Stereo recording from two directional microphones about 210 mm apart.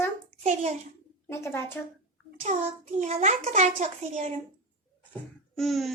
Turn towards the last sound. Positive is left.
turn(degrees=0)  # may be behind; listen again after turning